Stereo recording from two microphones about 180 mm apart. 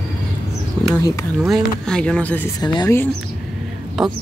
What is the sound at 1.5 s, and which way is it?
Speech, centre (ahead or behind).